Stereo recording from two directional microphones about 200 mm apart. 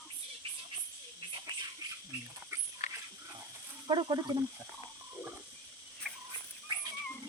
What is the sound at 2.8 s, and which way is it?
Dog, 35° left (ahead or behind).